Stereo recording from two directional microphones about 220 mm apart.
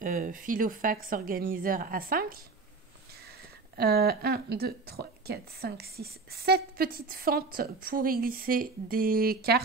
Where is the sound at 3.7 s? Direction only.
45° right (ahead or behind).